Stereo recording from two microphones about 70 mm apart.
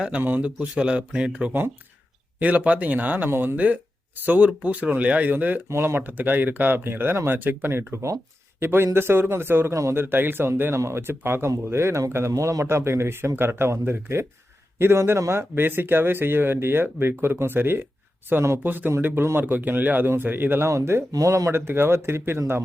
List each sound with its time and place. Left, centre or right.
0.2 s speech: right
5.6 s speech: right
20.7 s speech: right
21.1 s speech: right
21.5 s speech: right